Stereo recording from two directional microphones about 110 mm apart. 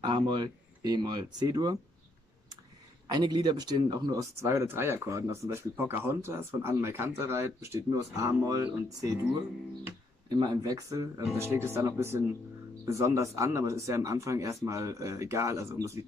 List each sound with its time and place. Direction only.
0.0 s speech: 45° right (ahead or behind)
3.1 s speech: 40° right (ahead or behind)
10.3 s speech: 35° right (ahead or behind)